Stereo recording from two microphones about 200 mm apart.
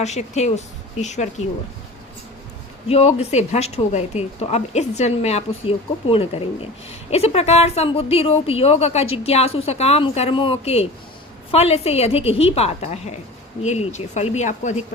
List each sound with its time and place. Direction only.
0.0 s a woman's voice: 35° left (ahead or behind)
2.9 s a woman's voice: 30° left (ahead or behind)